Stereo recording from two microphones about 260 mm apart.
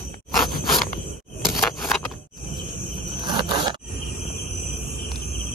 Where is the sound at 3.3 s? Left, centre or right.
Centre.